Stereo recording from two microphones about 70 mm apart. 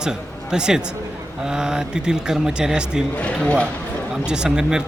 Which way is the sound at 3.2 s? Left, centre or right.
Left.